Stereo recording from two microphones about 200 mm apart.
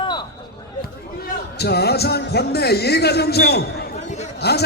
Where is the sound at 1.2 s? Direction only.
55° left (ahead or behind).